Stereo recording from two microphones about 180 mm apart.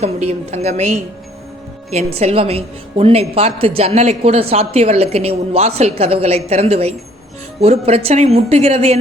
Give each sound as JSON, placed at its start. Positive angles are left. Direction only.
{"t": 0.0, "sound": "a woman's voice", "side_deg": -35}